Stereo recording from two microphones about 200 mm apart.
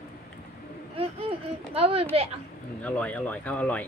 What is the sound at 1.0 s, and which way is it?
Speech, 30° right (ahead or behind).